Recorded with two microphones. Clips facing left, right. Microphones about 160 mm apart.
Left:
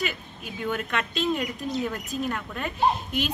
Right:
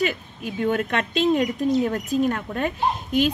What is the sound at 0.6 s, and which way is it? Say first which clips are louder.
A woman's voice: right 6 dB; 45° right (ahead or behind).